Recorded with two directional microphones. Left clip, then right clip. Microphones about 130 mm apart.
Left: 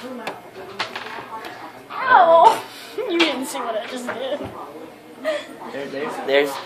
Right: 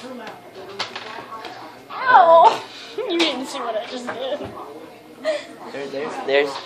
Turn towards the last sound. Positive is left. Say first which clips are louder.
# even
turn(degrees=10)  # may be behind; listen again after turning